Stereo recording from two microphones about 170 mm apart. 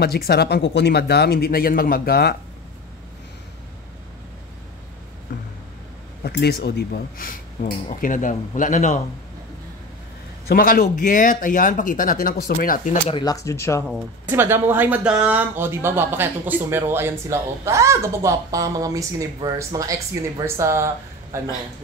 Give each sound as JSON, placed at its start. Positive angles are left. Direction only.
{"t": 0.0, "sound": "speech", "side_deg": 65}
{"t": 6.2, "sound": "speech", "side_deg": 70}
{"t": 7.8, "sound": "speech", "side_deg": 50}
{"t": 10.5, "sound": "speech", "side_deg": 55}
{"t": 13.0, "sound": "speech", "side_deg": 25}
{"t": 14.3, "sound": "speech", "side_deg": -15}